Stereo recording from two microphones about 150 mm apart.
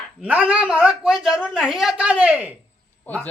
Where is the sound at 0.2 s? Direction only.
10° right (ahead or behind).